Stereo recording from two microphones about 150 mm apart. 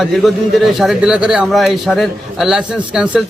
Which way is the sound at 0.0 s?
Centre (ahead or behind).